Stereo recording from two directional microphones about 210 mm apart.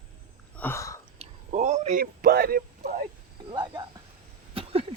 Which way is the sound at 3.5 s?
20° right (ahead or behind).